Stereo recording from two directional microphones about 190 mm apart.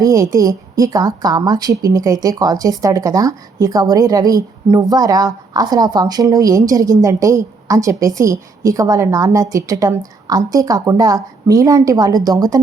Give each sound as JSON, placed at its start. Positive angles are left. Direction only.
{"t": 0.0, "sound": "a woman's voice", "side_deg": -15}